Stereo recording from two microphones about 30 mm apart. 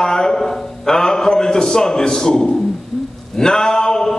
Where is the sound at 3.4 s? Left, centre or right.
Left.